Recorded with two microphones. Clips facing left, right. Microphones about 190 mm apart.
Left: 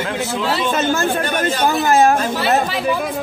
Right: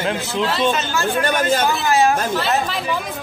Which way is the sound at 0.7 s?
55° left (ahead or behind).